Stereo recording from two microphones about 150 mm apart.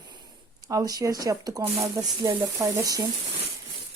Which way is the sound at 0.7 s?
25° right (ahead or behind).